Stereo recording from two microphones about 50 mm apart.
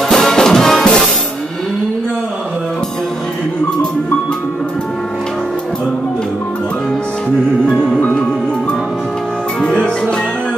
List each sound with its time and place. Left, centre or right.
0.1 s music: centre
9.6 s music: centre